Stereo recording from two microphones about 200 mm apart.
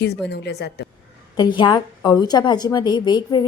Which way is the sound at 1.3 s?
20° left (ahead or behind).